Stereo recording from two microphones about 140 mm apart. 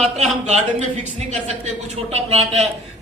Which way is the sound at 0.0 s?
55° right (ahead or behind).